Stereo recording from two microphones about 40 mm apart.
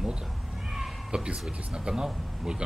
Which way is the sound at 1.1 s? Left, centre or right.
Right.